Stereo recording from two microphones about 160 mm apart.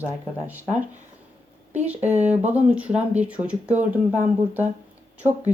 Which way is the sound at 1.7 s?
10° right (ahead or behind).